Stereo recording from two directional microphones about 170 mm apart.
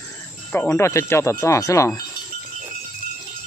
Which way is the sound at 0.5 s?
15° left (ahead or behind).